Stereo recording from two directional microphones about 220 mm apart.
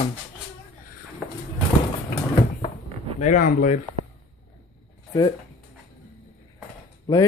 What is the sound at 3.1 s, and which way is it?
Speech, 35° left (ahead or behind).